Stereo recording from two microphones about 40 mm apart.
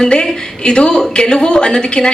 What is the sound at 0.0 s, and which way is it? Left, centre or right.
A woman's voice, left.